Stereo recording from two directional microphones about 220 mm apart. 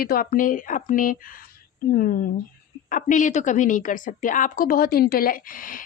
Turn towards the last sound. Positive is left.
turn(degrees=40)  # may be behind; listen again after turning